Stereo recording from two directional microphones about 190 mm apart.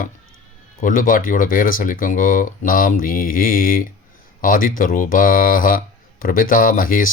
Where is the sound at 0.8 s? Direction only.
45° left (ahead or behind).